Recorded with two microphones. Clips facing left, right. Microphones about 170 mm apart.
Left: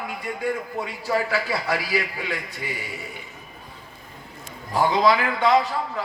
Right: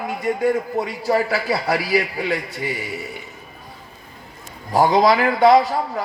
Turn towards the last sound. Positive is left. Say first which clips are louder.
# right 5 dB
turn(degrees=-35)  # may be behind; listen again after turning